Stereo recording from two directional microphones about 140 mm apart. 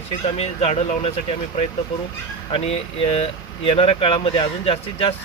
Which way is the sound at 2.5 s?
45° left (ahead or behind).